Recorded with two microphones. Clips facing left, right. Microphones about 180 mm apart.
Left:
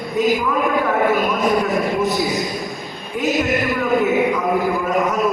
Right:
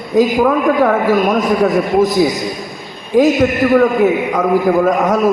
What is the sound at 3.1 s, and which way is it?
Speech, 90° right.